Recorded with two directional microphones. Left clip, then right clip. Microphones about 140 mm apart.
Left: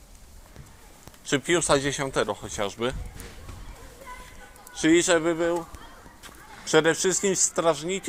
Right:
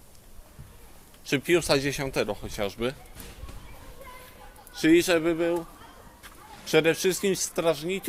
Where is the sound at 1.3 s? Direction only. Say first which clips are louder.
Left 1 dB; 25° right (ahead or behind).